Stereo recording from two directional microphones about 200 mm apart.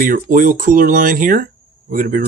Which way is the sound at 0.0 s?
45° right (ahead or behind).